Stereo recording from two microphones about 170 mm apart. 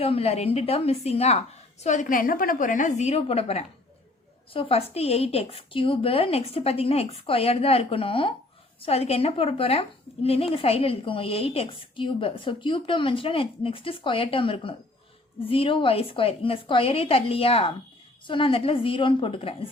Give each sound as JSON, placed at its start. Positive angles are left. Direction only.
{"t": 0.0, "sound": "a woman's voice", "side_deg": 35}